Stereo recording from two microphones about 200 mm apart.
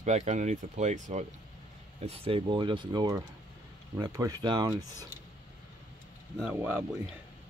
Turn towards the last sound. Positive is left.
turn(degrees=-10)  # may be behind; listen again after turning